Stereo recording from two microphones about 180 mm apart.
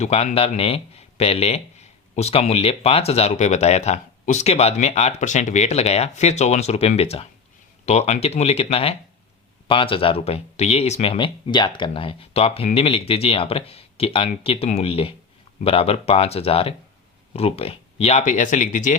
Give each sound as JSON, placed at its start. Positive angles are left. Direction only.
{"t": 0.0, "sound": "speech", "side_deg": 35}